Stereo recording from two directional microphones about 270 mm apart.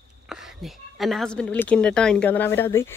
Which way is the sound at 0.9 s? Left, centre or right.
Centre.